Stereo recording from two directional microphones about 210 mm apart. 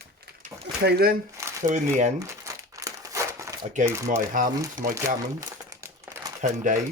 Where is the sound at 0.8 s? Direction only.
50° right (ahead or behind).